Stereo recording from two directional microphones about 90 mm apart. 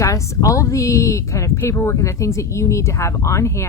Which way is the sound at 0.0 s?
35° left (ahead or behind).